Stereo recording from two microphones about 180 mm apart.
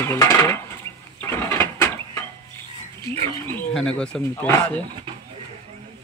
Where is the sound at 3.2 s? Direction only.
10° left (ahead or behind).